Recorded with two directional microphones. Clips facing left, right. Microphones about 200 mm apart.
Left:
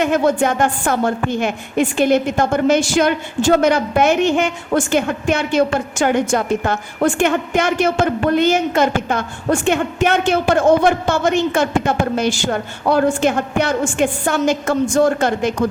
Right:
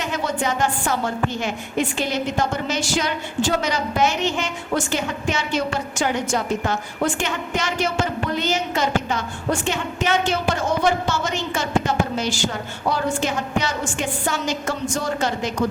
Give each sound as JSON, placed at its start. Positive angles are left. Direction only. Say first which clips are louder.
{"t": 0.0, "sound": "a woman's voice", "louder": "left 9 dB", "side_deg": 55}